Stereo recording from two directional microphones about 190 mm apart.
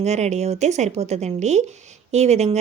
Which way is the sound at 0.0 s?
35° right (ahead or behind).